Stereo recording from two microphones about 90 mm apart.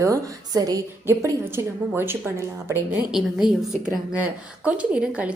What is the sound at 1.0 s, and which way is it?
A woman's voice, 25° right (ahead or behind).